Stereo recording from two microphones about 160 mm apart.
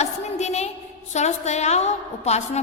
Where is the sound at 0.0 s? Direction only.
45° left (ahead or behind).